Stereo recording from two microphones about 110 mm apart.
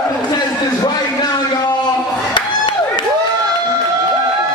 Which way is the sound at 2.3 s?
45° left (ahead or behind).